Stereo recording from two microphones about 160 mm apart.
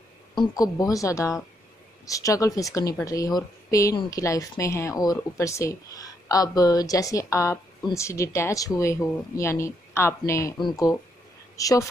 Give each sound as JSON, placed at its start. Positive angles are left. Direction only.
{"t": 0.4, "sound": "a woman's voice", "side_deg": 25}